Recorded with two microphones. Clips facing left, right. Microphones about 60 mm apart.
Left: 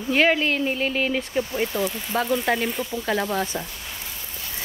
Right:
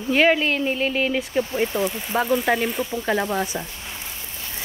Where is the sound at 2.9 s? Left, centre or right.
Right.